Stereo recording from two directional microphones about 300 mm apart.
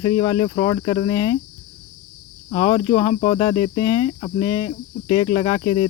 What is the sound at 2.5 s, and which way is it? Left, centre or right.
Cricket, centre.